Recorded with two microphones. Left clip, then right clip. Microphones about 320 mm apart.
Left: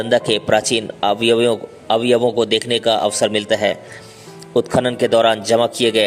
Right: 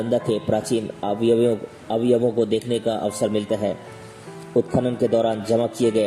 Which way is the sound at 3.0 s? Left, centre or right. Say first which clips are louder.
Left 6 dB; left.